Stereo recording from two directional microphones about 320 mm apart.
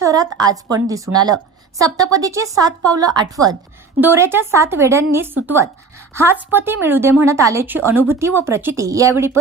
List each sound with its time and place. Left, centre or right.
0.0 s speech: centre